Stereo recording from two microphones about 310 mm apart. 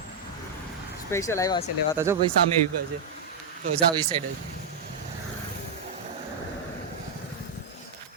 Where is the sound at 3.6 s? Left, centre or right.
Centre.